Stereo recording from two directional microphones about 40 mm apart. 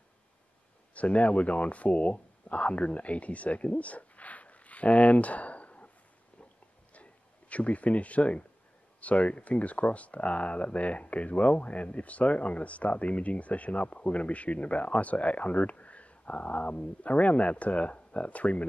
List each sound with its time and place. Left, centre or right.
0.9 s speech: left
6.9 s a sound: left
9.0 s speech: left